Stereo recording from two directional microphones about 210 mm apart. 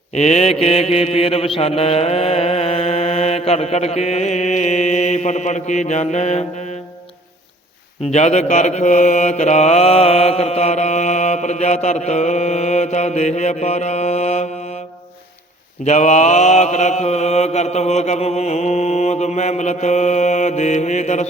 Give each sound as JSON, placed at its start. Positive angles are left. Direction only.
{"t": 0.1, "sound": "mantra", "side_deg": 30}
{"t": 8.1, "sound": "mantra", "side_deg": 35}
{"t": 15.8, "sound": "mantra", "side_deg": 35}